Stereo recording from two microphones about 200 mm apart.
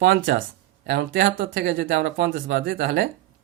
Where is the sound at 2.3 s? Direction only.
50° right (ahead or behind).